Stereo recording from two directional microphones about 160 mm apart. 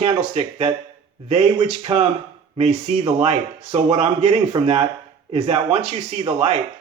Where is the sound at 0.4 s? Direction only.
45° right (ahead or behind).